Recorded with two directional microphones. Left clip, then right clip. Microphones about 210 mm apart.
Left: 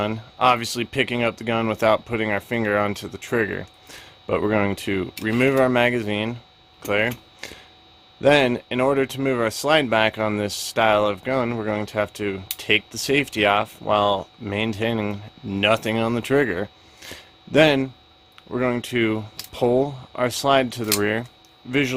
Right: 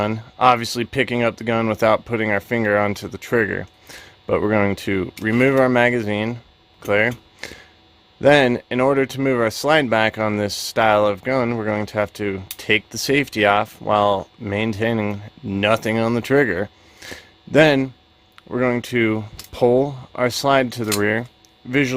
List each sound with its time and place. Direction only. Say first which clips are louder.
0.0 s speech: right 3 dB; 15° right (ahead or behind)